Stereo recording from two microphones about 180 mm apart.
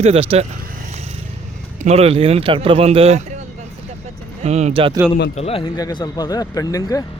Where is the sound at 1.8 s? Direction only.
35° right (ahead or behind).